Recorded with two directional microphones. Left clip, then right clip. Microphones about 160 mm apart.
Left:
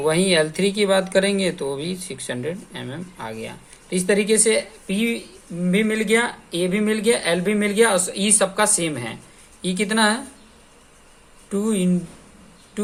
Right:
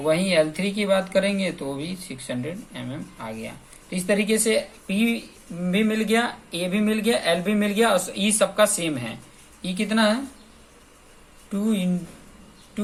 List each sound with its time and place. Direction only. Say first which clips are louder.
0.0 s speech: left 2 dB; 50° left (ahead or behind)
11.5 s speech: left 4 dB; 50° left (ahead or behind)